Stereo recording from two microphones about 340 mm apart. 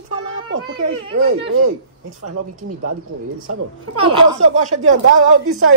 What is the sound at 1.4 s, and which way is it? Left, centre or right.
Speech, right.